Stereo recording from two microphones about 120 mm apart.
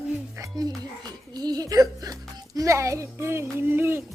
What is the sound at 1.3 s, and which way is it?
A child's voice, 35° right (ahead or behind).